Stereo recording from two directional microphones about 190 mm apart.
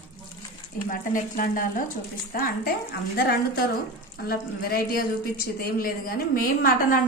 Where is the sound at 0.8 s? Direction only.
45° left (ahead or behind).